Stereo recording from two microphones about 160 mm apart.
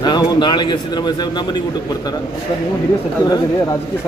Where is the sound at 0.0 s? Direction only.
25° left (ahead or behind).